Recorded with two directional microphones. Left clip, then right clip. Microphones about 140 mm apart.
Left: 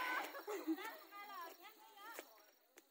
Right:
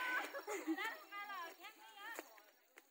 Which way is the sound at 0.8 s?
40° right (ahead or behind).